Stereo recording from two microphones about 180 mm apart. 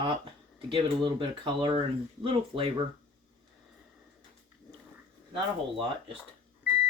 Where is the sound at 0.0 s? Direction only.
30° right (ahead or behind).